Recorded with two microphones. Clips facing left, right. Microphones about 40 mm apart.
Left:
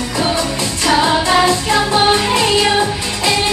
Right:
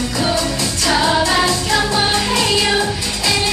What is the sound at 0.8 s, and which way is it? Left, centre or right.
Music, left.